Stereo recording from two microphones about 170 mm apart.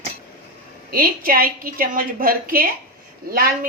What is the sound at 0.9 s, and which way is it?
A woman's voice, 60° right (ahead or behind).